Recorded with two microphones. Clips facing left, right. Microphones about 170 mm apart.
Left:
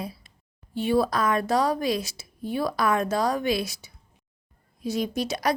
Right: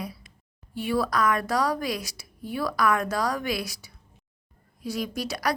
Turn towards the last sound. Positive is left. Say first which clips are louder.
# left 3 dB
turn(degrees=20)  # may be behind; listen again after turning